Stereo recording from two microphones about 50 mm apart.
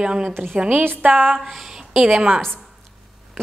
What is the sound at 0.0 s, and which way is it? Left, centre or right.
Speech, centre.